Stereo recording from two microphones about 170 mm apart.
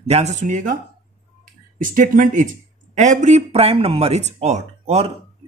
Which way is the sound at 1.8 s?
50° right (ahead or behind).